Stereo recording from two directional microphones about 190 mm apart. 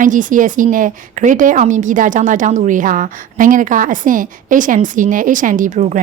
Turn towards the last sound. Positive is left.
turn(degrees=-40)  # may be behind; listen again after turning